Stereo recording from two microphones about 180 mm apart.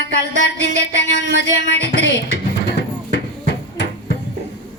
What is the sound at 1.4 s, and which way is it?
Speech, 75° left (ahead or behind).